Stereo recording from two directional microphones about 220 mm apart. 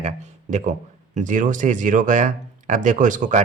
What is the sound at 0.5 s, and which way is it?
A man's voice, 30° right (ahead or behind).